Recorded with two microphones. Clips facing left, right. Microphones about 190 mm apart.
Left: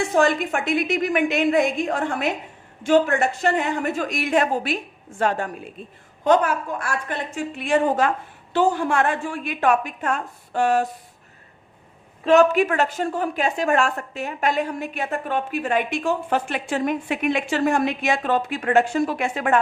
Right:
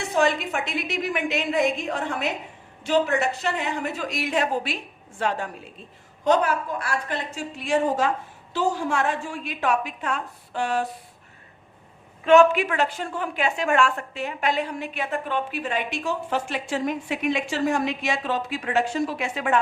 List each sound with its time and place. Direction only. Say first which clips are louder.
0.0 s a woman's voice: left 3 dB; 50° left (ahead or behind)
12.2 s a woman's voice: left 1 dB; 40° left (ahead or behind)